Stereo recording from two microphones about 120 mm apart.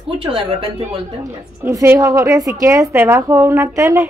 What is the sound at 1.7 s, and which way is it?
A woman's voice, 30° right (ahead or behind).